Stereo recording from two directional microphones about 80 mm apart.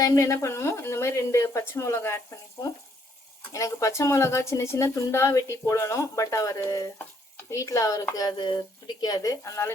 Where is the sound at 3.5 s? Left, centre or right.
Left.